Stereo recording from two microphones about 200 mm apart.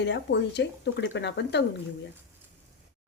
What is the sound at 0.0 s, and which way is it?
A woman's voice, 60° left (ahead or behind).